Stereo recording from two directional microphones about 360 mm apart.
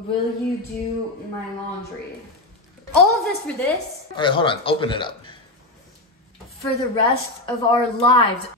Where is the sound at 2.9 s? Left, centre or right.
Centre.